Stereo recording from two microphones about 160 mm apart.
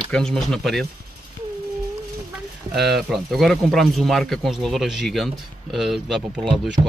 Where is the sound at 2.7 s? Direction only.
Centre (ahead or behind).